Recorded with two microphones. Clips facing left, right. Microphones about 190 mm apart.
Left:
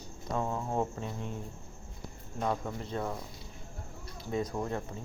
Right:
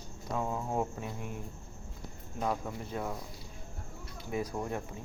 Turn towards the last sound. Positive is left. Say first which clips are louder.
# left 2 dB
turn(degrees=-10)  # may be behind; listen again after turning